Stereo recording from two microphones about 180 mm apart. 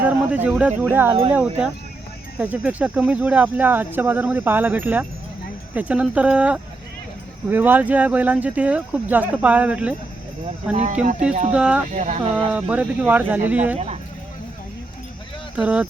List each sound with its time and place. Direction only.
0.0 s a sound: 10° right (ahead or behind)
0.8 s speech: 10° right (ahead or behind)
11.9 s speech: 40° right (ahead or behind)
12.5 s speech: 5° right (ahead or behind)
13.7 s speech: 35° right (ahead or behind)
15.5 s speech: 5° right (ahead or behind)